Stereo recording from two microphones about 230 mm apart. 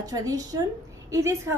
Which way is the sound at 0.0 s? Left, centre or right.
Centre.